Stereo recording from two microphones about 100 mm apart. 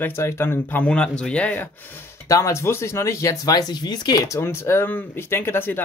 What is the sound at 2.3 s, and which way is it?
Speech, 30° left (ahead or behind).